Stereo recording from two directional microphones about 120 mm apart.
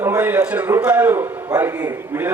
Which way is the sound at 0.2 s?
10° right (ahead or behind).